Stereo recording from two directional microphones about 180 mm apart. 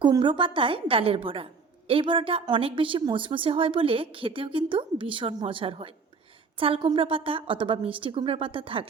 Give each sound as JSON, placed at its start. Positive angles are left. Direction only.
{"t": 0.0, "sound": "a woman's voice", "side_deg": -25}